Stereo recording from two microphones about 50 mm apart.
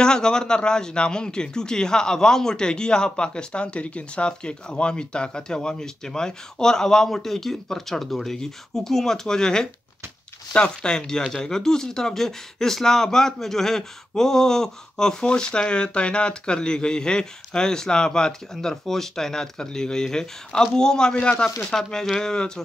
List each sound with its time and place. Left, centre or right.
0.0 s speech: centre